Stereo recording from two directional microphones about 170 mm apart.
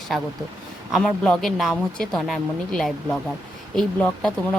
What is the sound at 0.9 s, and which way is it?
A woman's voice, centre (ahead or behind).